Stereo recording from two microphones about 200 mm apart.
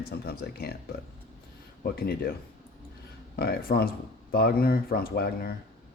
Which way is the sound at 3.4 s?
50° left (ahead or behind).